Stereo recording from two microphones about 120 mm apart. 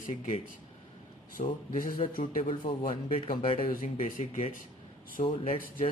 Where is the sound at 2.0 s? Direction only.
50° left (ahead or behind).